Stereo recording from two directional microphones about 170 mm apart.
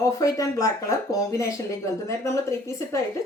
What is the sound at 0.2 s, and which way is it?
A woman's voice, 20° left (ahead or behind).